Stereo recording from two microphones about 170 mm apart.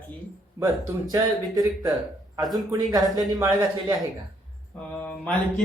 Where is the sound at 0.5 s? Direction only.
20° right (ahead or behind).